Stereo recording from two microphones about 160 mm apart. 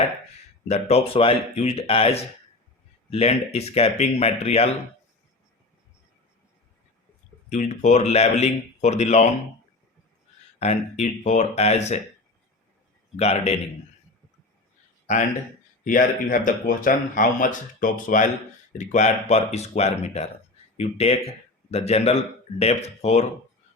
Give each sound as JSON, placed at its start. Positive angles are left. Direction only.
{"t": 0.7, "sound": "speech", "side_deg": 40}
{"t": 7.5, "sound": "speech", "side_deg": 45}
{"t": 10.6, "sound": "speech", "side_deg": 45}
{"t": 13.1, "sound": "speech", "side_deg": 40}
{"t": 15.8, "sound": "speech", "side_deg": 60}